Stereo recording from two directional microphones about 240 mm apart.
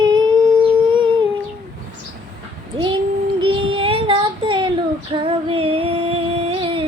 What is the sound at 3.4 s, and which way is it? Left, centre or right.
Child singing, right.